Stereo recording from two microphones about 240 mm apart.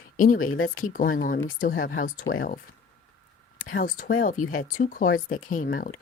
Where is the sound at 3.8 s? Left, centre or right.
Left.